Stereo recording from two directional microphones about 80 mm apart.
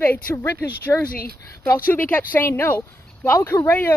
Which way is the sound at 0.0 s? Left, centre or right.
Left.